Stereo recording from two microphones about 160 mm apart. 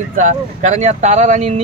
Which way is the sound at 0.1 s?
50° right (ahead or behind).